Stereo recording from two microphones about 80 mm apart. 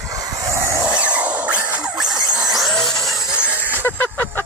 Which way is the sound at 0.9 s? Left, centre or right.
Centre.